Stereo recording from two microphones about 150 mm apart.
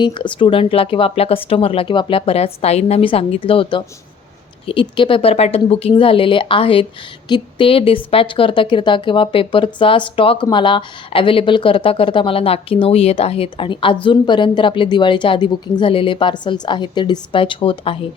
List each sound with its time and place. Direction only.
0.0 s speech: 35° left (ahead or behind)